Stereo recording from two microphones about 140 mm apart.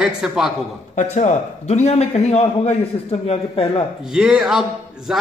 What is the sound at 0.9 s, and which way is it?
A man's voice, 55° left (ahead or behind).